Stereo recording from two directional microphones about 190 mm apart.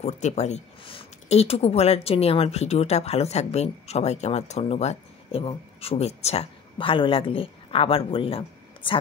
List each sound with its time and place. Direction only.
0.0 s speech: 35° left (ahead or behind)